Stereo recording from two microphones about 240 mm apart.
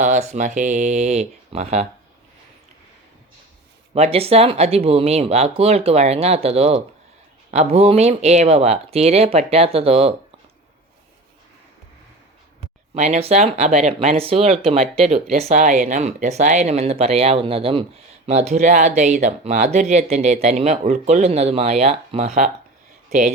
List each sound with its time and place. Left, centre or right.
0.0 s speech: right
3.9 s speech: right
12.9 s speech: right